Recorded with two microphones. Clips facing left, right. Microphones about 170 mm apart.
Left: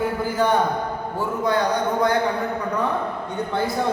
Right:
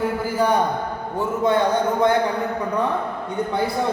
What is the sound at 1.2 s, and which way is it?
Speech, 25° right (ahead or behind).